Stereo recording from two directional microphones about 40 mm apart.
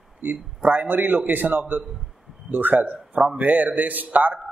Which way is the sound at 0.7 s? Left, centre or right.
Right.